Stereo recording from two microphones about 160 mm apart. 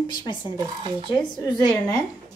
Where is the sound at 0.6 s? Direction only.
25° right (ahead or behind).